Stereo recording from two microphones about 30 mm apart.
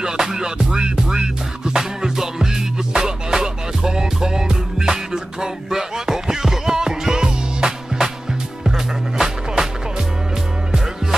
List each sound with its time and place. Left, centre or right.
0.0 s music: centre